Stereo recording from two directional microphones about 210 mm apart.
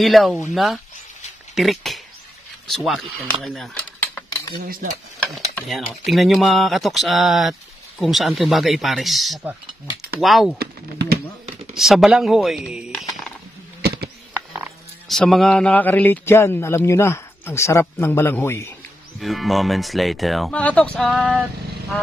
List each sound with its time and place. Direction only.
0.0 s speech: centre (ahead or behind)
5.7 s speech: centre (ahead or behind)
10.6 s speech: 50° right (ahead or behind)
11.7 s speech: centre (ahead or behind)
13.8 s a sound: 50° right (ahead or behind)
15.0 s a man's voice: centre (ahead or behind)
19.1 s speech: centre (ahead or behind)